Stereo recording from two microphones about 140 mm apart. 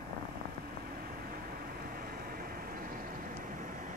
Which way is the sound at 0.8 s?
90° right.